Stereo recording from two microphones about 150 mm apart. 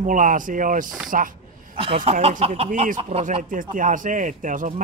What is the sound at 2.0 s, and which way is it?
Speech, 45° right (ahead or behind).